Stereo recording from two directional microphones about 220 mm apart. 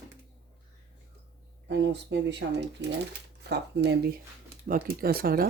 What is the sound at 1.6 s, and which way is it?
Speech, 50° right (ahead or behind).